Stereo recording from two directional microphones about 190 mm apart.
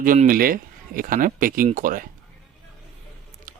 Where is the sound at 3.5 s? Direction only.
45° right (ahead or behind).